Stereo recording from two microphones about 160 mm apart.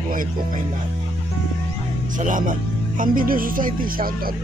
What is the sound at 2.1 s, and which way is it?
Speech, 55° right (ahead or behind).